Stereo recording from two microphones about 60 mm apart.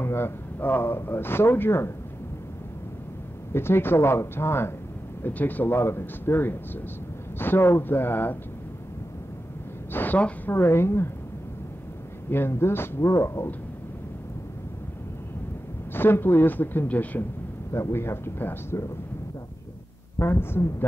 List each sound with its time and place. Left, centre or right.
0.0 s speech: left
3.5 s speech: left
5.2 s speech: left
9.9 s speech: left
10.5 s speech: left
12.3 s speech: left
15.9 s speech: left
17.7 s speech: left
20.2 s speech: left